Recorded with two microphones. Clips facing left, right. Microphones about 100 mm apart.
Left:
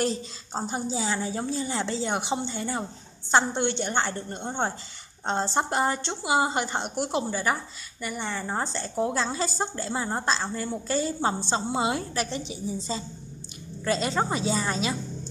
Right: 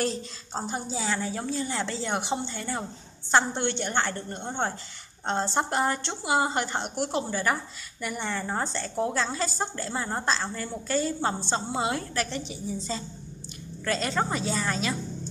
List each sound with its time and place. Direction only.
0.0 s a woman's voice: 10° left (ahead or behind)